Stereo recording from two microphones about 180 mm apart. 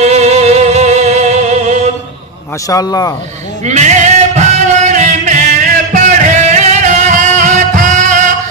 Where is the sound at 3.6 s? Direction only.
40° right (ahead or behind).